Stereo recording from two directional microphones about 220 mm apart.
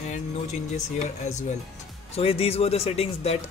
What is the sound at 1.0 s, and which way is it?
Speech, 35° left (ahead or behind).